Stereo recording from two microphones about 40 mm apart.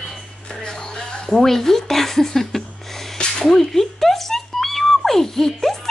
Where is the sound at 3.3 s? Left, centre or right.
Centre.